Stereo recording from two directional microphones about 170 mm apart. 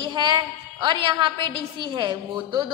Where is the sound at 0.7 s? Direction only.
25° right (ahead or behind).